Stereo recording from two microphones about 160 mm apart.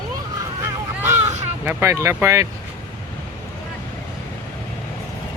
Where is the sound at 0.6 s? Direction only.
15° right (ahead or behind).